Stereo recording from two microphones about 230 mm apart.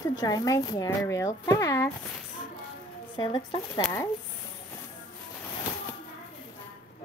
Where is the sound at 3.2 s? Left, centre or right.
Centre.